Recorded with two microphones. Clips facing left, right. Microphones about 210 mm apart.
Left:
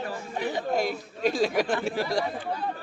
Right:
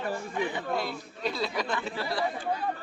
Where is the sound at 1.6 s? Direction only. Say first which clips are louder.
Left 6 dB; 50° left (ahead or behind).